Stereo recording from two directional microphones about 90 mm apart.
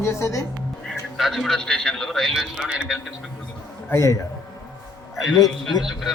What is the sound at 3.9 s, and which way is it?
Speech, 35° left (ahead or behind).